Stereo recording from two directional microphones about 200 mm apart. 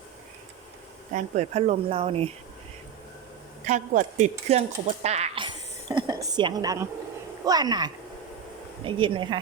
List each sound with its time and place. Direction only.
1.1 s speech: 35° right (ahead or behind)
3.7 s speech: 35° right (ahead or behind)
5.9 s a sound: 20° right (ahead or behind)
7.4 s speech: 20° right (ahead or behind)